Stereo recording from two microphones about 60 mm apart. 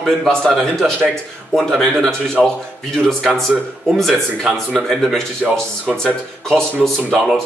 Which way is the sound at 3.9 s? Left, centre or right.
Centre.